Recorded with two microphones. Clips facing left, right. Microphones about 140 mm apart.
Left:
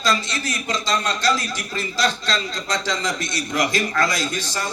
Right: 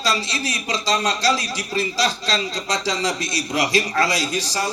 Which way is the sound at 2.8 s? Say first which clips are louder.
Right 2 dB; 10° right (ahead or behind).